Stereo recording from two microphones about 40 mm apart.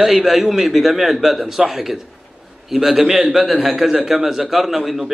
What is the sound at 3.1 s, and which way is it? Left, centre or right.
Speech, right.